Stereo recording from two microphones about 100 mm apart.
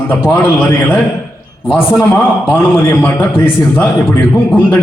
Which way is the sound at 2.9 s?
20° left (ahead or behind).